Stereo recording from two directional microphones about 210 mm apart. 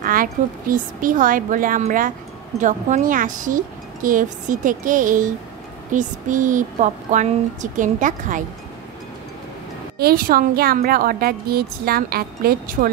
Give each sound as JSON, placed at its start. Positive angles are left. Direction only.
{"t": 0.0, "sound": "speech", "side_deg": -40}
{"t": 9.9, "sound": "a woman's voice", "side_deg": -45}